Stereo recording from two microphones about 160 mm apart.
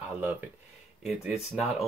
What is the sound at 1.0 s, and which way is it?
Speech, 5° right (ahead or behind).